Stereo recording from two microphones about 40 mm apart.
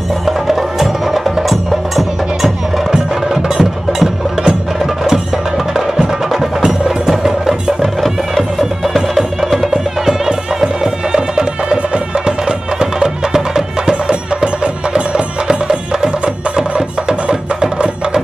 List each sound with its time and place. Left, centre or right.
0.2 s wood block: centre
2.9 s music: centre
5.9 s music: centre
10.2 s music: centre
17.3 s music: right